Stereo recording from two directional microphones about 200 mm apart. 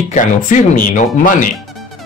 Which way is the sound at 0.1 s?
40° left (ahead or behind).